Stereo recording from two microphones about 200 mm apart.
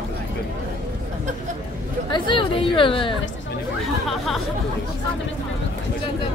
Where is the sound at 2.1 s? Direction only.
25° left (ahead or behind).